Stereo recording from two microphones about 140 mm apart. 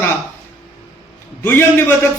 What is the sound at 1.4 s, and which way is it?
Speech, 15° left (ahead or behind).